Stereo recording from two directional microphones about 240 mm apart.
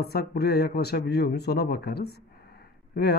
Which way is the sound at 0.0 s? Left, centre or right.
Left.